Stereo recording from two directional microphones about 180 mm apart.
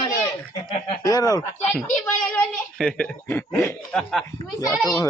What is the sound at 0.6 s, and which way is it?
Speech, 30° left (ahead or behind).